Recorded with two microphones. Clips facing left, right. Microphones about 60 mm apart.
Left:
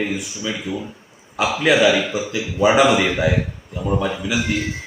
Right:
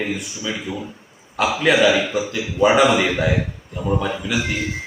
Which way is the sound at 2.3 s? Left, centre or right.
Centre.